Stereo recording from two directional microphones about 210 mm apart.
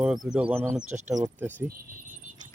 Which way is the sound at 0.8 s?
35° right (ahead or behind).